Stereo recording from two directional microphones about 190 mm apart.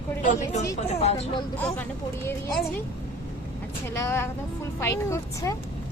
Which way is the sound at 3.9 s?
15° left (ahead or behind).